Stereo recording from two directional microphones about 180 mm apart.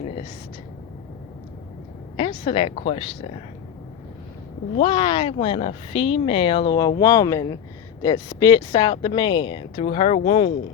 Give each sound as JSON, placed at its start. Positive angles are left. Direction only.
{"t": 2.1, "sound": "a woman's voice", "side_deg": 30}
{"t": 4.8, "sound": "speech", "side_deg": 30}